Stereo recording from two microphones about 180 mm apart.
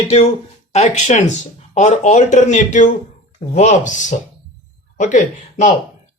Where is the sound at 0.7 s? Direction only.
40° left (ahead or behind).